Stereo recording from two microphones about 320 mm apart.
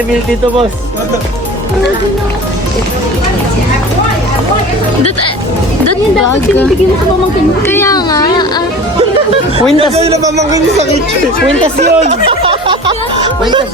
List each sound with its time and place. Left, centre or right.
5.8 s speech: left
7.7 s speech: centre
9.7 s a man's voice: centre
11.8 s a man's voice: right
12.3 s music: centre